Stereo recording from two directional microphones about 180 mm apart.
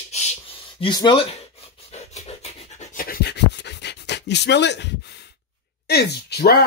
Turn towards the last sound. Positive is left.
turn(degrees=60)  # may be behind; listen again after turning